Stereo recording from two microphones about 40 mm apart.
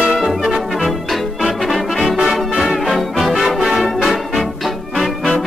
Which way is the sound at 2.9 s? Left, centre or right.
Centre.